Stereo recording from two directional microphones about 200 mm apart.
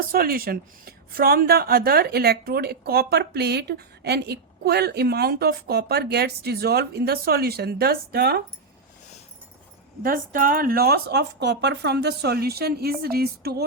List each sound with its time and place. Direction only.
0.1 s a woman's voice: 50° right (ahead or behind)
10.0 s a woman's voice: 45° right (ahead or behind)